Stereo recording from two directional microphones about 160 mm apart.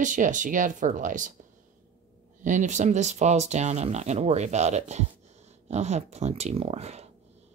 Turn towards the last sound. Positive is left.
turn(degrees=-40)  # may be behind; listen again after turning